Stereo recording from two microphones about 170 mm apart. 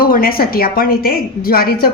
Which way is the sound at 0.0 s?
60° left (ahead or behind).